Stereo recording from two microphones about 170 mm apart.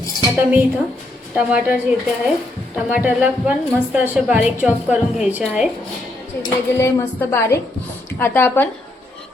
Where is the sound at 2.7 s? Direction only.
10° right (ahead or behind).